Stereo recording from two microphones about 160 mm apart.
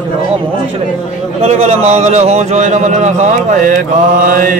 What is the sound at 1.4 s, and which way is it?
Speech, 40° right (ahead or behind).